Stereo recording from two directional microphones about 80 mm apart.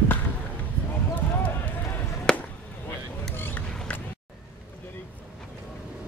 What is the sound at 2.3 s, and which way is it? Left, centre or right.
Chop, centre.